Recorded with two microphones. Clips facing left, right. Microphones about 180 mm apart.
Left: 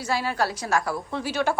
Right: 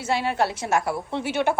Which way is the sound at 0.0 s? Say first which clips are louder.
Right 2 dB; 25° right (ahead or behind).